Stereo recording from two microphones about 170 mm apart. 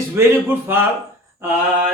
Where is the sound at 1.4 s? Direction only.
15° right (ahead or behind).